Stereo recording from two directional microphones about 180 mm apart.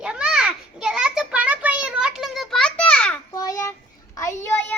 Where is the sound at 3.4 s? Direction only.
20° left (ahead or behind).